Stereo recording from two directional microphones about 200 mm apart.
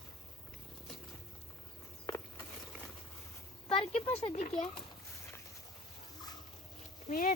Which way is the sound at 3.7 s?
25° left (ahead or behind).